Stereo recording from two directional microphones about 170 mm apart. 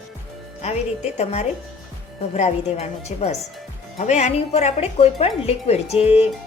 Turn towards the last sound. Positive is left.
turn(degrees=35)  # may be behind; listen again after turning